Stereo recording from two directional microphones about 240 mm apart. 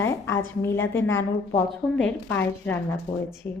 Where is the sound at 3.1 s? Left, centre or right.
Left.